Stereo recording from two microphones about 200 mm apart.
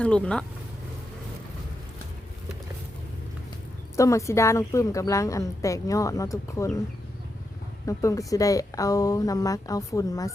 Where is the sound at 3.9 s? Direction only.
15° left (ahead or behind).